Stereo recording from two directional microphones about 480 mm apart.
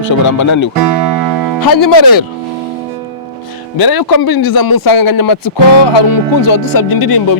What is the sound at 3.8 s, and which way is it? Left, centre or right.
A man's voice, left.